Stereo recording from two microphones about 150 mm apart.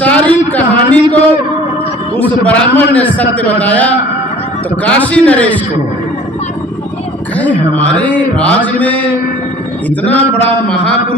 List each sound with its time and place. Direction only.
0.0 s a sound: 10° left (ahead or behind)
2.1 s a man's voice: 10° left (ahead or behind)
7.3 s a man's voice: 10° left (ahead or behind)